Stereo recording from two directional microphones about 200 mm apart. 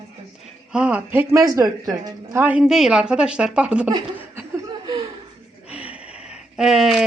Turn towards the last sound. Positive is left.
turn(degrees=-5)  # may be behind; listen again after turning